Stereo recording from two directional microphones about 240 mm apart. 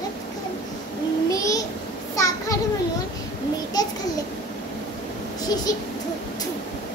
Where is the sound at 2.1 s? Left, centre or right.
Centre.